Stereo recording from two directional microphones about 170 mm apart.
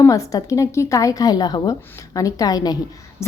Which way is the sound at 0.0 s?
20° left (ahead or behind).